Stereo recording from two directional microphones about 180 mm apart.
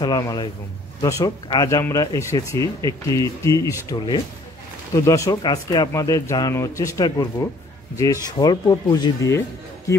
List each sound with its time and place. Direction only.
0.0 s speech: 20° left (ahead or behind)
8.3 s speech: 20° left (ahead or behind)